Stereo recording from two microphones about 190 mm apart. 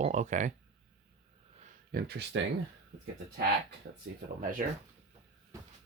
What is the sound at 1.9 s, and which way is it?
Speech, 55° right (ahead or behind).